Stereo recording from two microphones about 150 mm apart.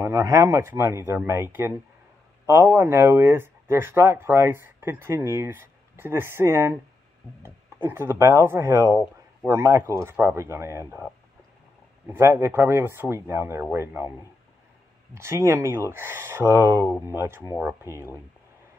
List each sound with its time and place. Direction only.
0.0 s speech: 20° right (ahead or behind)
12.1 s speech: 15° right (ahead or behind)
15.1 s speech: 15° right (ahead or behind)